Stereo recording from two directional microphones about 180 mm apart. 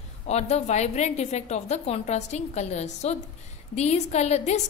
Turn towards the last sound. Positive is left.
turn(degrees=35)  # may be behind; listen again after turning